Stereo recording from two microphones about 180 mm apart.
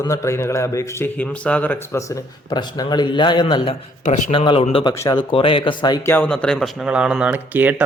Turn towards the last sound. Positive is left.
turn(degrees=-10)  # may be behind; listen again after turning